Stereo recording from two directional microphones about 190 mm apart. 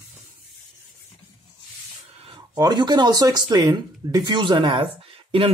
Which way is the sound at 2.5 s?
20° right (ahead or behind).